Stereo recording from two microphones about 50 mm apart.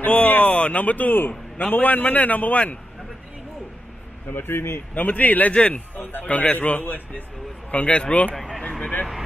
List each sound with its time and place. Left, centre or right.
0.0 s a sound: left
1.7 s a man's voice: left
4.3 s speech: left
4.9 s a man's voice: left
5.5 s a man's voice: left
8.4 s a sound: centre